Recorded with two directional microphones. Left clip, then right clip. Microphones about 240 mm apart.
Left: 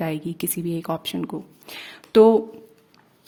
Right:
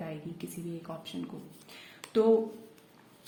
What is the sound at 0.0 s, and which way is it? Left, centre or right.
Speech, left.